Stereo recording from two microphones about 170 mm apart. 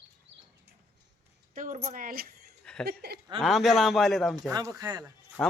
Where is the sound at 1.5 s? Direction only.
50° right (ahead or behind); by 3.2 s 70° right (ahead or behind).